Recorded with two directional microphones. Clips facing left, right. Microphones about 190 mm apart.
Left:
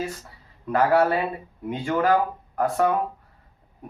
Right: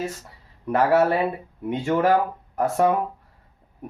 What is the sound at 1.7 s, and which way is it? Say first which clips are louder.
Speech: right 2 dB; 25° right (ahead or behind).